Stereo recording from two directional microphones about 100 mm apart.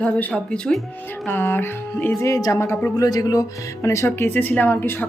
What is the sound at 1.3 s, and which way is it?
Speech, 20° left (ahead or behind).